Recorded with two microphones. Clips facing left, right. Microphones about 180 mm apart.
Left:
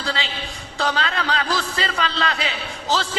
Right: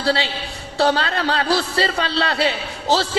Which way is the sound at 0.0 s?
35° right (ahead or behind).